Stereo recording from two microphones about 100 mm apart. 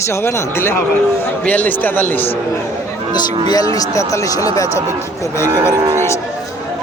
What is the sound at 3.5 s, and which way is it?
Speech, 40° left (ahead or behind).